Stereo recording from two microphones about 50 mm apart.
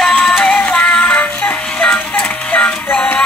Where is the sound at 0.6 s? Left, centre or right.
Left.